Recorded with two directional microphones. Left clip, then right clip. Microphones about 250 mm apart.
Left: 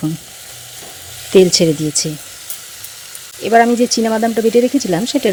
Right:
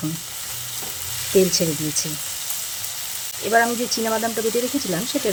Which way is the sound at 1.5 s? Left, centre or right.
Left.